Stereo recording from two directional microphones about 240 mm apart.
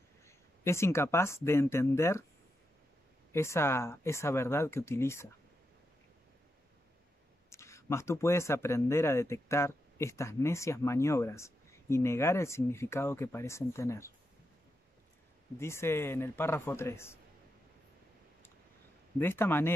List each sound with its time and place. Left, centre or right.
0.7 s speech: centre
3.3 s speech: centre
7.4 s speech: centre
15.6 s speech: centre
19.1 s speech: centre